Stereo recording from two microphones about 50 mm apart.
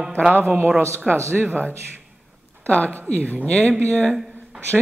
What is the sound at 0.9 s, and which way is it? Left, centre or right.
Speech, right.